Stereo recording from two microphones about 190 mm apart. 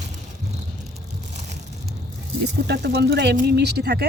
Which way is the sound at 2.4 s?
60° right (ahead or behind).